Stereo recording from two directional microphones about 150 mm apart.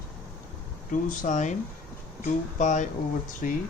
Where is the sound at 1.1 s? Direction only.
60° left (ahead or behind).